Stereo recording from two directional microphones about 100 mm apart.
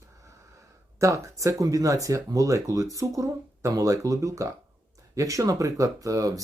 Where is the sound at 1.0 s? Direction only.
30° right (ahead or behind).